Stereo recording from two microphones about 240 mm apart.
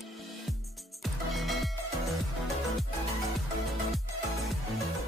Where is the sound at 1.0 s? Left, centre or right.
Centre.